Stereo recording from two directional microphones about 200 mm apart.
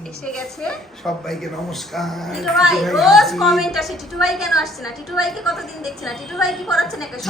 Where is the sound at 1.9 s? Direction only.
Centre (ahead or behind).